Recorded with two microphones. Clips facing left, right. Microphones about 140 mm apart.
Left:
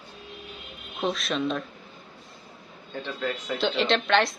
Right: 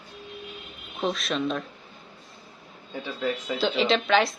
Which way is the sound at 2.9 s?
5° right (ahead or behind).